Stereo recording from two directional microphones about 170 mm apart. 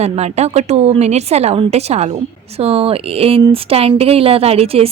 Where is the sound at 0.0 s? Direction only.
40° right (ahead or behind).